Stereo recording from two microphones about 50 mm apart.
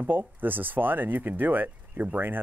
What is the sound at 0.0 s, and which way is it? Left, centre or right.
Speech, right.